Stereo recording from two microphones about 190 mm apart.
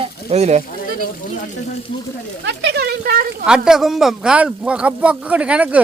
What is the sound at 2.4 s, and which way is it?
Speech, 60° right (ahead or behind).